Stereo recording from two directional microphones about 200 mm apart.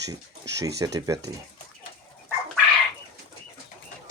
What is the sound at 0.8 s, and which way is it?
Speech, 15° right (ahead or behind).